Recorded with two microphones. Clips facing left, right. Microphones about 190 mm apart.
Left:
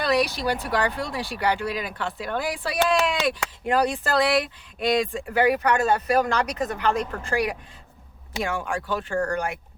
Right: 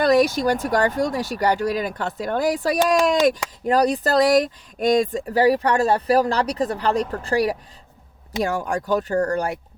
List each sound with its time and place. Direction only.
0.0 s speech: 45° right (ahead or behind)